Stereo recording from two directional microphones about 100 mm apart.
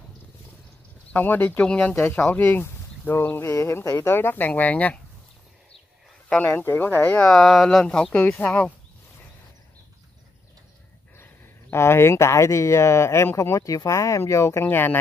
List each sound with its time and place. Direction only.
1.1 s speech: 20° left (ahead or behind)
6.2 s speech: 15° left (ahead or behind)
7.3 s speech: centre (ahead or behind)
11.7 s speech: 25° left (ahead or behind)